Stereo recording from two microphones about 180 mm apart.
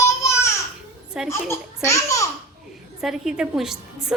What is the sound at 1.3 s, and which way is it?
Baby laughter, 15° left (ahead or behind).